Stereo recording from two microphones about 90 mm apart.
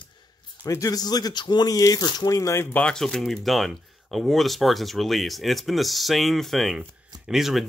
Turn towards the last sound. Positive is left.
turn(degrees=0)  # may be behind; listen again after turning